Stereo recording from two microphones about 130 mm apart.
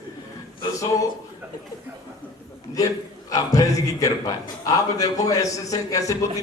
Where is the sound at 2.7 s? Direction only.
25° left (ahead or behind).